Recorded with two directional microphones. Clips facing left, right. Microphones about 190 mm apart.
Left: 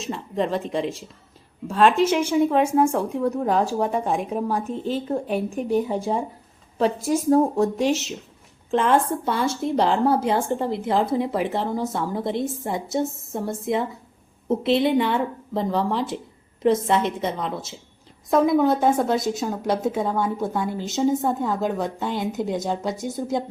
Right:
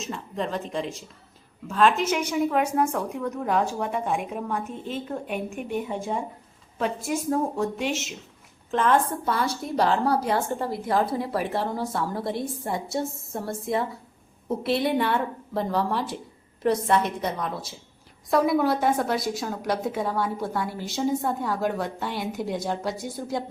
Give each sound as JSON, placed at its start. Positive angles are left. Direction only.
{"t": 0.0, "sound": "a woman's voice", "side_deg": 35}
{"t": 8.7, "sound": "a woman's voice", "side_deg": 30}